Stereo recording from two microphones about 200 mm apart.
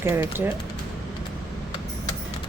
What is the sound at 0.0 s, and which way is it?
Speech, 10° right (ahead or behind).